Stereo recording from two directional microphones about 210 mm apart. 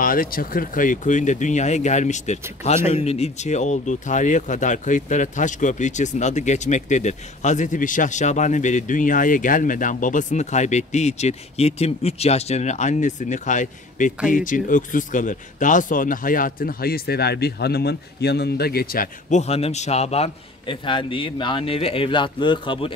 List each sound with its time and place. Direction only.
0.0 s speech: 40° left (ahead or behind); by 22.9 s 25° left (ahead or behind)